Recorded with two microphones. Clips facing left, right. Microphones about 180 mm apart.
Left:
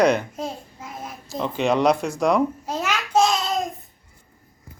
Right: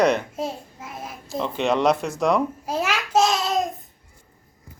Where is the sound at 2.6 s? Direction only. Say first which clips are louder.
Right 1 dB; 10° right (ahead or behind).